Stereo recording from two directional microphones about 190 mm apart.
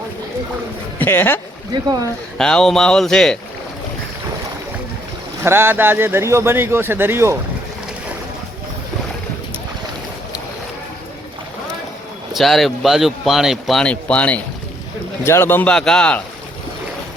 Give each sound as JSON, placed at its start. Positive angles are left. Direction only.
{"t": 0.9, "sound": "a man's voice", "side_deg": 10}
{"t": 1.7, "sound": "speech", "side_deg": -20}
{"t": 2.4, "sound": "a man's voice", "side_deg": 5}
{"t": 5.4, "sound": "speech", "side_deg": -10}
{"t": 12.3, "sound": "a man's voice", "side_deg": 0}